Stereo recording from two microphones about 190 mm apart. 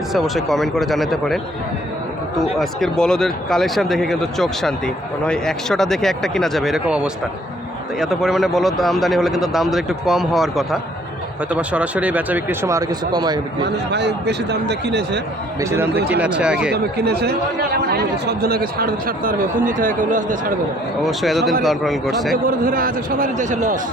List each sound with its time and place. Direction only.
0.1 s speech: centre (ahead or behind)
2.6 s speech: centre (ahead or behind); by 13.4 s 20° right (ahead or behind)
13.9 s a man's voice: 65° right (ahead or behind)
15.7 s speech: 10° right (ahead or behind)
16.7 s a man's voice: 60° right (ahead or behind)
21.0 s speech: centre (ahead or behind)
22.4 s speech: 50° right (ahead or behind)